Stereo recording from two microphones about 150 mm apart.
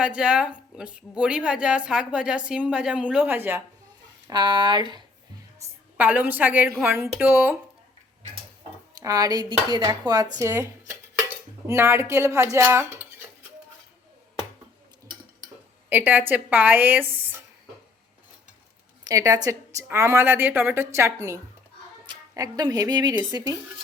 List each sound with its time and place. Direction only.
0.0 s a woman's voice: 5° right (ahead or behind)
4.3 s a woman's voice: 30° right (ahead or behind)
5.6 s a sound: 20° right (ahead or behind)
6.0 s a woman's voice: 10° right (ahead or behind)
9.0 s dishes: 25° right (ahead or behind)
9.4 s dishes: 30° left (ahead or behind)
9.7 s a woman's voice: 30° right (ahead or behind)
15.9 s a woman's voice: 10° right (ahead or behind)
19.0 s a woman's voice: 20° right (ahead or behind)